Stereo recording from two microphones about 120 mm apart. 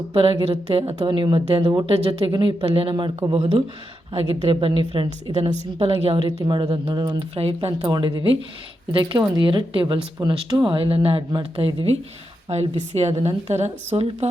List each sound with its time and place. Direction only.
0.1 s a woman's voice: 50° right (ahead or behind)
1.0 s speech: 40° right (ahead or behind)
1.9 s a woman's voice: 50° right (ahead or behind)
4.1 s a woman's voice: 60° right (ahead or behind); by 7.3 s 35° right (ahead or behind)
7.3 s a woman's voice: 50° right (ahead or behind)
9.3 s a woman's voice: 40° right (ahead or behind)
12.5 s a woman's voice: 60° right (ahead or behind)